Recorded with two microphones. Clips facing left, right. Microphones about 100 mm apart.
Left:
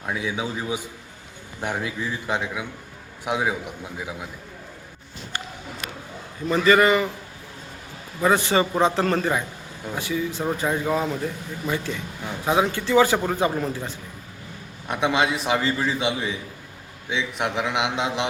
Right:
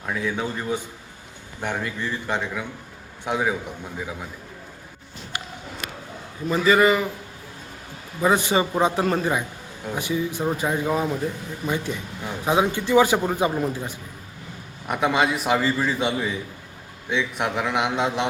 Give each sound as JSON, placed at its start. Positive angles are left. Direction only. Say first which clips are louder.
{"t": 0.0, "sound": "a man's voice", "louder": "right 1 dB", "side_deg": 10}
{"t": 6.5, "sound": "a man's voice", "louder": "left 1 dB", "side_deg": -5}
{"t": 8.2, "sound": "a man's voice", "louder": "even", "side_deg": -15}
{"t": 14.8, "sound": "a man's voice", "louder": "right 1 dB", "side_deg": 0}